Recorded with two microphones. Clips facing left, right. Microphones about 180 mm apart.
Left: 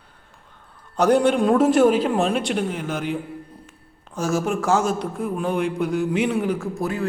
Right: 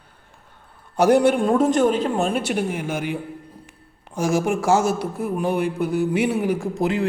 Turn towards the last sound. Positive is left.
turn(degrees=-20)  # may be behind; listen again after turning